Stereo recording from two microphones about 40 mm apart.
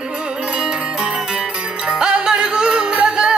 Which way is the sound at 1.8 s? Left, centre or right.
Right.